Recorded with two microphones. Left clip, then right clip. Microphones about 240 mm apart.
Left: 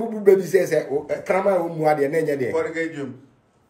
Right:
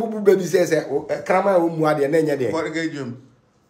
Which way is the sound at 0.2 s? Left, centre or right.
Centre.